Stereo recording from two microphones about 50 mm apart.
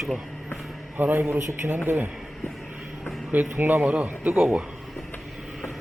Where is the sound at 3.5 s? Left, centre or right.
Right.